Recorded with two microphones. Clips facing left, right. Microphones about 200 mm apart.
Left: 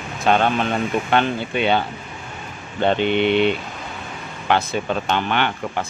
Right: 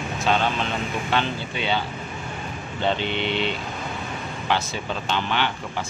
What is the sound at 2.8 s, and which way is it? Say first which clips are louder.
Speech: left 7 dB; 55° left (ahead or behind).